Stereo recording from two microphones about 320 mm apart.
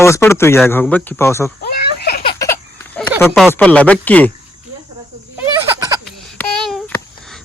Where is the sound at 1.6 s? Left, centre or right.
Left.